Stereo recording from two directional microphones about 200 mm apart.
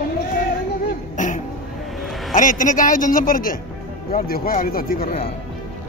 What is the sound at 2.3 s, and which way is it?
A man's voice, 40° left (ahead or behind).